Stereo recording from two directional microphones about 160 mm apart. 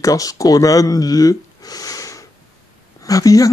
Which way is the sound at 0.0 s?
20° left (ahead or behind).